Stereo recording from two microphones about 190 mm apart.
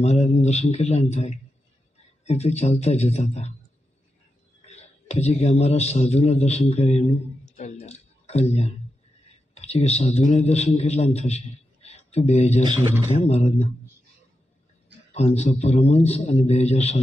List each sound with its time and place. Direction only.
0.0 s a man's voice: 35° left (ahead or behind)
4.6 s a man's voice: 35° left (ahead or behind)
15.1 s a man's voice: 35° left (ahead or behind)